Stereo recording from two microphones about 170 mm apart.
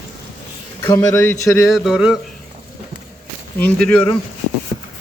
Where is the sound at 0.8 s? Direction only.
20° left (ahead or behind).